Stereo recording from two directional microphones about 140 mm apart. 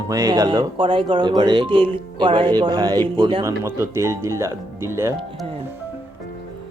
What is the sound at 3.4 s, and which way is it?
Speech, 20° right (ahead or behind).